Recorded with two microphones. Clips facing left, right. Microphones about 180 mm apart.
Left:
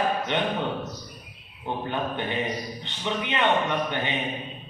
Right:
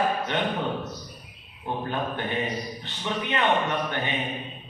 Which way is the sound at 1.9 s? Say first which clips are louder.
Left 1 dB; 20° left (ahead or behind).